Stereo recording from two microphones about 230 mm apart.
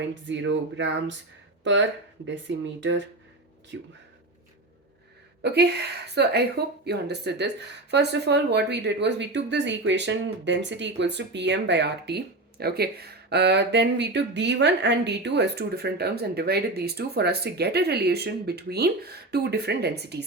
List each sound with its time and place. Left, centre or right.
0.3 s speech: right
2.5 s speech: right
3.7 s speech: right
5.4 s speech: right